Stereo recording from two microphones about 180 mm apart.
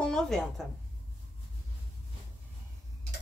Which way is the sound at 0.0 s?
5° left (ahead or behind).